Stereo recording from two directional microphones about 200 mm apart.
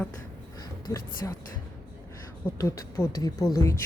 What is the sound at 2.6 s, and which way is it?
Speech, 15° left (ahead or behind).